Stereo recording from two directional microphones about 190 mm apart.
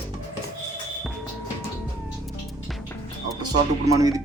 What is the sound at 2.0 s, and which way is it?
Music, centre (ahead or behind).